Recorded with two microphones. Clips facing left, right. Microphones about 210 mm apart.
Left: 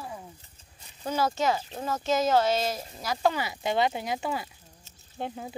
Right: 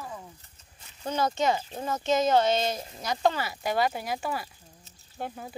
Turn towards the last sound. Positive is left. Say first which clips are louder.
# left 2 dB
turn(degrees=20)  # may be behind; listen again after turning